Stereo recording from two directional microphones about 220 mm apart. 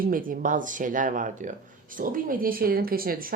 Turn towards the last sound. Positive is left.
turn(degrees=-40)  # may be behind; listen again after turning